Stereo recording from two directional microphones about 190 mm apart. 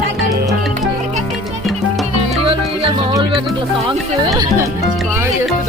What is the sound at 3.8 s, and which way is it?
Speech, 20° right (ahead or behind).